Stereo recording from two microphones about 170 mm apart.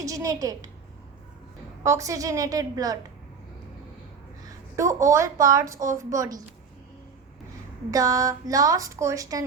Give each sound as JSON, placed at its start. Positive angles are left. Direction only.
{"t": 0.0, "sound": "a woman's voice", "side_deg": -20}
{"t": 1.8, "sound": "a woman's voice", "side_deg": -15}
{"t": 4.4, "sound": "a woman's voice", "side_deg": -20}
{"t": 7.9, "sound": "a woman's voice", "side_deg": -20}